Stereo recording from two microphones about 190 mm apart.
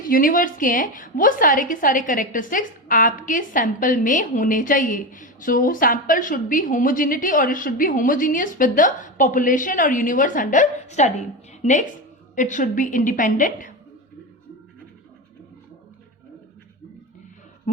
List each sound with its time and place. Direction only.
0.0 s a woman's voice: 45° left (ahead or behind)